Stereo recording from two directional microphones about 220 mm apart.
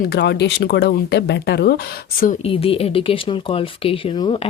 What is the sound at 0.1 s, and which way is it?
Speech, 50° left (ahead or behind).